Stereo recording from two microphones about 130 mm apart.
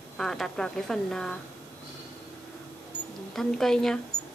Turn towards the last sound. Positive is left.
turn(degrees=5)  # may be behind; listen again after turning